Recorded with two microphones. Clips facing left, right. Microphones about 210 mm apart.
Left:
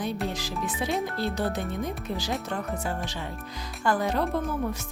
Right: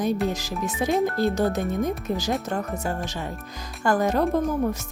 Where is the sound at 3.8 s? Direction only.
45° right (ahead or behind).